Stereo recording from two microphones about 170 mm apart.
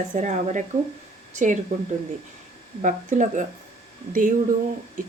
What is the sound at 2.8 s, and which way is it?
Speech, 45° right (ahead or behind).